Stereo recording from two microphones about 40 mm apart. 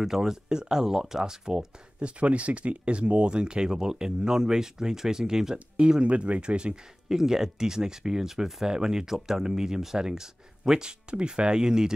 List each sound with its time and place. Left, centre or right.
0.0 s speech: centre
2.0 s speech: right
5.8 s speech: right
7.1 s speech: centre